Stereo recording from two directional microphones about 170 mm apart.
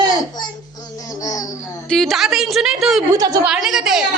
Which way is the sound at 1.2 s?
20° left (ahead or behind).